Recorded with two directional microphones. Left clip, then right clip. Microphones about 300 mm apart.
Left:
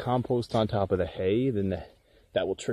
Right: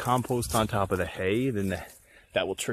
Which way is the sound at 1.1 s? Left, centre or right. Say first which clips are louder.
Left 1 dB; centre.